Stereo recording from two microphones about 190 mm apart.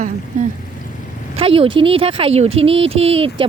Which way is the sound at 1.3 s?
30° right (ahead or behind).